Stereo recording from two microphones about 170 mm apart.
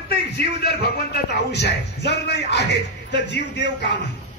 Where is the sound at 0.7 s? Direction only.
75° left (ahead or behind); by 4.0 s 90° left.